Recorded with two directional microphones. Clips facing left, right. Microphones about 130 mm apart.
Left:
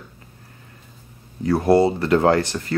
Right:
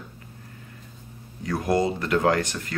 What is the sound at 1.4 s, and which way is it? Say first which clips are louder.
Speech: left 7 dB; 30° left (ahead or behind).